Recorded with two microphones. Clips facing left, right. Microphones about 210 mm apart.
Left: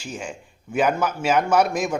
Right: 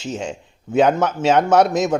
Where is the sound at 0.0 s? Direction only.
25° right (ahead or behind).